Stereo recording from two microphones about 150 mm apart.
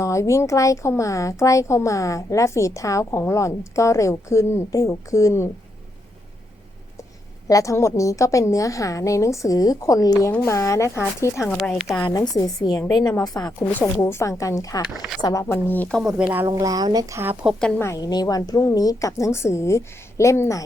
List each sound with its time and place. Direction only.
0.0 s speech: 20° left (ahead or behind)
7.4 s speech: 20° left (ahead or behind)
11.4 s speech: 5° left (ahead or behind)
12.0 s speech: 25° left (ahead or behind)
15.5 s speech: 10° left (ahead or behind)
16.0 s speech: 5° right (ahead or behind)
16.5 s speech: 25° right (ahead or behind)
17.7 s speech: 20° left (ahead or behind)